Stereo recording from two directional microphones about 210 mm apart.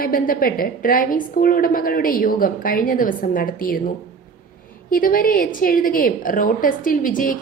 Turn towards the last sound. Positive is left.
turn(degrees=40)  # may be behind; listen again after turning